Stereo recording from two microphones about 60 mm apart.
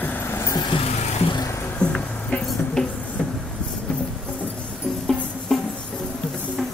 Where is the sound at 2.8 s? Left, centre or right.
Centre.